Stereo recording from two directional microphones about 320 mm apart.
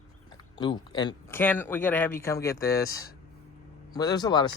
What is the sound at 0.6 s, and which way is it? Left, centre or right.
Speech, centre.